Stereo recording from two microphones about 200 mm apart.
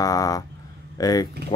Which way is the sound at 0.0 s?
20° left (ahead or behind).